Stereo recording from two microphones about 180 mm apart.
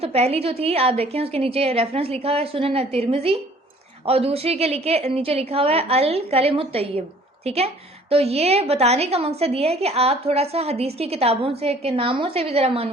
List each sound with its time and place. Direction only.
0.0 s a woman's voice: 35° right (ahead or behind)